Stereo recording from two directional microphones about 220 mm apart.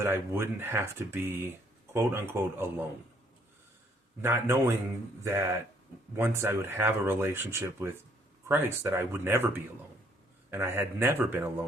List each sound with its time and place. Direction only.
0.0 s speech: 10° right (ahead or behind)
4.2 s speech: 10° right (ahead or behind)